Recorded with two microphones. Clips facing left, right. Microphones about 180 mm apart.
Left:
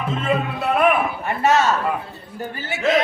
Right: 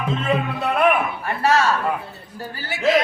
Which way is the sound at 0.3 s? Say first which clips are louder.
Left 2 dB; 5° left (ahead or behind).